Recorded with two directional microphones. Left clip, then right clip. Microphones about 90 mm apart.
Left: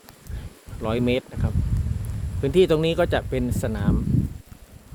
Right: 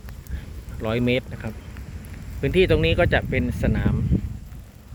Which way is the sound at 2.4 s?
30° left (ahead or behind).